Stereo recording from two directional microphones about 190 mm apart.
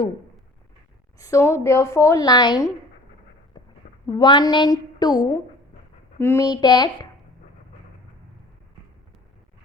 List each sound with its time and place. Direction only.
1.2 s a woman's voice: 15° left (ahead or behind)
4.0 s a woman's voice: 25° left (ahead or behind)